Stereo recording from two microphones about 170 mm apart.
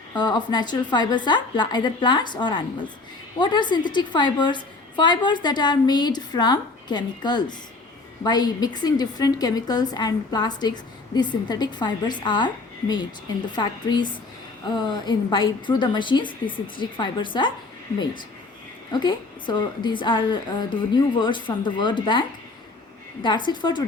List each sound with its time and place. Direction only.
0.2 s a woman's voice: 25° left (ahead or behind)
13.6 s a woman's voice: 25° left (ahead or behind)
18.9 s a woman's voice: 25° left (ahead or behind)